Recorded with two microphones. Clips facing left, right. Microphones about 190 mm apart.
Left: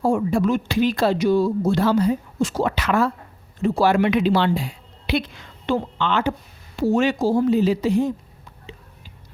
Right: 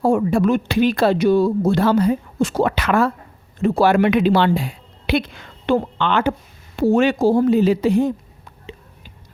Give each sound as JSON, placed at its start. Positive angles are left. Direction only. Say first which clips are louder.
{"t": 0.0, "sound": "a woman's voice", "louder": "right 3 dB", "side_deg": -60}